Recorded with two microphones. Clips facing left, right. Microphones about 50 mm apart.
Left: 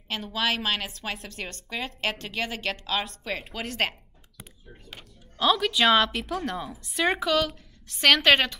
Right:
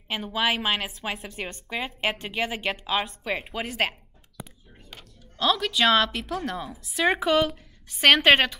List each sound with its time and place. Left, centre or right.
0.1 s a woman's voice: centre
4.8 s speech: centre
7.2 s a woman's voice: centre